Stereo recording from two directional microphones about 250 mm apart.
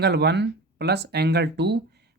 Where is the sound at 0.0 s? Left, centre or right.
Right.